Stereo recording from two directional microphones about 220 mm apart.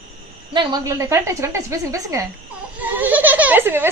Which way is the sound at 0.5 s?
15° right (ahead or behind).